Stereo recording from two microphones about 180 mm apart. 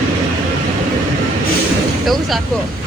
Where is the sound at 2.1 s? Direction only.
Centre (ahead or behind).